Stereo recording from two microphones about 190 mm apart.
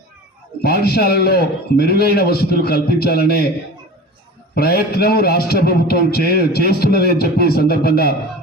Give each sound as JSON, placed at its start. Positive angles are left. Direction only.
{"t": 0.6, "sound": "a man's voice", "side_deg": 55}
{"t": 4.5, "sound": "a man's voice", "side_deg": 55}